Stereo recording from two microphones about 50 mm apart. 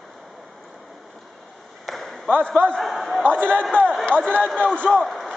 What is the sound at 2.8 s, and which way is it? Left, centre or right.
Speech, centre.